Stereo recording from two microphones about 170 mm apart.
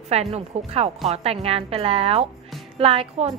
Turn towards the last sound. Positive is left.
turn(degrees=-35)  # may be behind; listen again after turning